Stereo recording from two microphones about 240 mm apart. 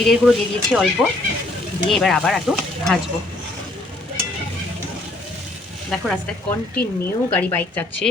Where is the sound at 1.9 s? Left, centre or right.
Centre.